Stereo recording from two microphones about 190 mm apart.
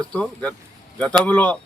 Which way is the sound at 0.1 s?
5° left (ahead or behind).